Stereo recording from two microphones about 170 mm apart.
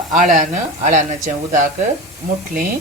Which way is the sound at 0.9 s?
45° right (ahead or behind).